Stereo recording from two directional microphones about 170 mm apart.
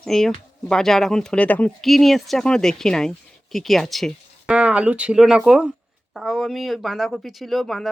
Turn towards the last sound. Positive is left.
turn(degrees=0)  # may be behind; listen again after turning